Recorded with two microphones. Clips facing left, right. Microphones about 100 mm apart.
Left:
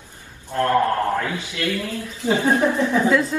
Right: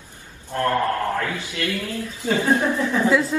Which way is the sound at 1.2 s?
20° left (ahead or behind).